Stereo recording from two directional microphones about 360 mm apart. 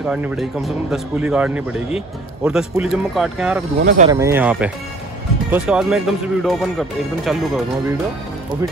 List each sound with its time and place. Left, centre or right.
0.0 s speech: centre
3.8 s speech: right
4.1 s speech: centre